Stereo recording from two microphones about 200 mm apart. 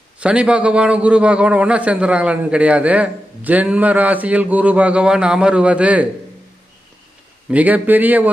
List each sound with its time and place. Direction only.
0.2 s a man's voice: 5° right (ahead or behind)
7.5 s a man's voice: 10° right (ahead or behind)